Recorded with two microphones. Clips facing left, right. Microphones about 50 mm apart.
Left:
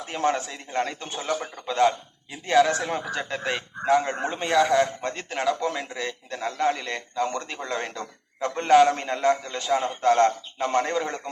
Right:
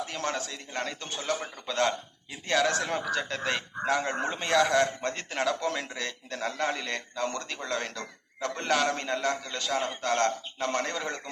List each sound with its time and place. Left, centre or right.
0.1 s a man's voice: left